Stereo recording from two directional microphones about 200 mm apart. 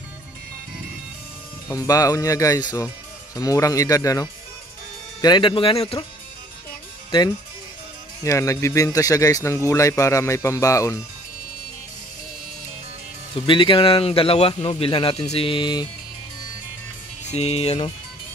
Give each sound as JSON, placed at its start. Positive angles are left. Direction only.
{"t": 1.7, "sound": "speech", "side_deg": 15}
{"t": 7.1, "sound": "speech", "side_deg": 25}
{"t": 13.3, "sound": "speech", "side_deg": 25}
{"t": 17.3, "sound": "speech", "side_deg": 30}